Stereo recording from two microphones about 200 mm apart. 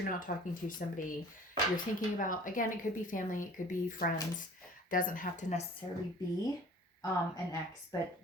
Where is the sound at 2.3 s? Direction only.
40° left (ahead or behind).